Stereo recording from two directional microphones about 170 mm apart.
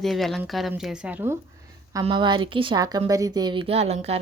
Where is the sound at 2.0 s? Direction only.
25° right (ahead or behind).